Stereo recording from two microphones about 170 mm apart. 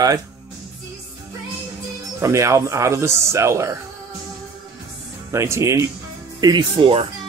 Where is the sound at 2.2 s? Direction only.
15° right (ahead or behind).